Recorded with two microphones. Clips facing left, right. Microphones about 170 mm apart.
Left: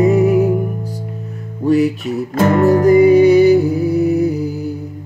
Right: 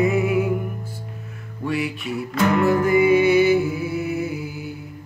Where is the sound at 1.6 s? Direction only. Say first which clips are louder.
Left 11 dB; 40° left (ahead or behind).